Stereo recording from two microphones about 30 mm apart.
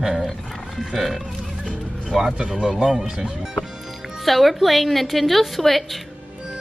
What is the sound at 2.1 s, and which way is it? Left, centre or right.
Speech, centre.